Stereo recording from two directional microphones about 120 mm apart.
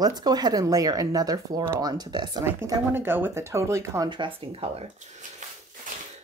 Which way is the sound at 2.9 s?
15° right (ahead or behind).